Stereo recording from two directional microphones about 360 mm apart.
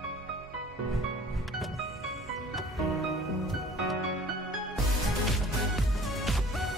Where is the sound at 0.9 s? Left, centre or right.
Centre.